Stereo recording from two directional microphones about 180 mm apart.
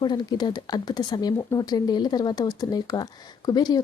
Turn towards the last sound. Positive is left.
turn(degrees=20)  # may be behind; listen again after turning